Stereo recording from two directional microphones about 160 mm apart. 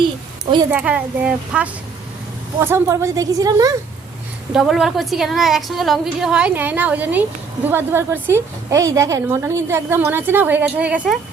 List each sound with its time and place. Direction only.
0.7 s a woman's voice: 10° right (ahead or behind)
4.5 s a woman's voice: centre (ahead or behind)